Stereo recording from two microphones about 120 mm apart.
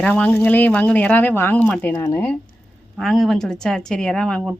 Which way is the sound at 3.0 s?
Centre (ahead or behind).